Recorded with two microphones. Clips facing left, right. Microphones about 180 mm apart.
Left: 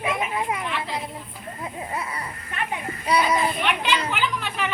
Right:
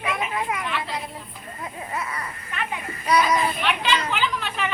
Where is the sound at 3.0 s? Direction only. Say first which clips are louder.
Right 1 dB; 25° left (ahead or behind).